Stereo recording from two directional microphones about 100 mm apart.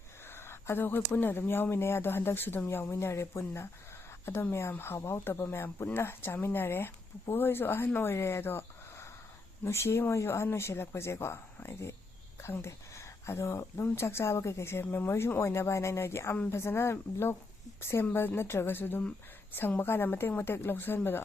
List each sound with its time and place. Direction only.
0.3 s speech: 25° left (ahead or behind)